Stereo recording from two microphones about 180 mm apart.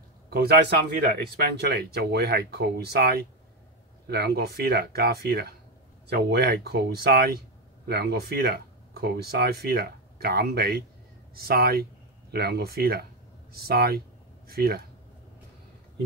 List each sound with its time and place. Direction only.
0.3 s speech: 60° right (ahead or behind)